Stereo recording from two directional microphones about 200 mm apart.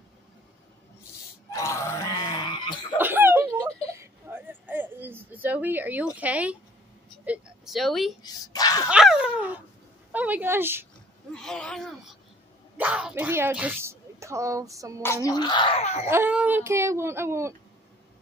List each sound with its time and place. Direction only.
1.5 s a sound: 15° left (ahead or behind)
3.0 s a sound: 10° right (ahead or behind)
6.1 s speech: 5° right (ahead or behind)
8.2 s speech: 20° left (ahead or behind)
8.8 s speech: 5° right (ahead or behind)
11.3 s speech: 5° left (ahead or behind); by 15.0 s 15° right (ahead or behind)
15.2 s speech: 20° left (ahead or behind)
16.1 s speech: 10° right (ahead or behind)